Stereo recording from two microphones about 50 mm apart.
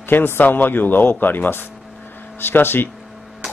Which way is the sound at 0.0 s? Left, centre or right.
Left.